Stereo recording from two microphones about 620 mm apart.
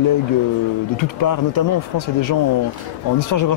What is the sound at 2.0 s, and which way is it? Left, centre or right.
Speech, left.